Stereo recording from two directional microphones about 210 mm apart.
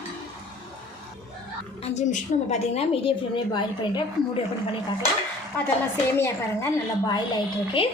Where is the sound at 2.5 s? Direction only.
30° left (ahead or behind).